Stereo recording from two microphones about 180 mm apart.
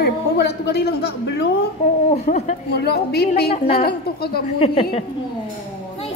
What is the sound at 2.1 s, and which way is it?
Speech, 40° left (ahead or behind).